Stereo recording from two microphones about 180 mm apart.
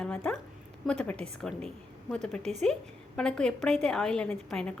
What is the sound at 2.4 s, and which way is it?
Speech, 40° right (ahead or behind).